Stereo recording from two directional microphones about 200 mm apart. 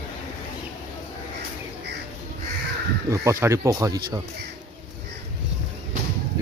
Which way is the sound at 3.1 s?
15° right (ahead or behind).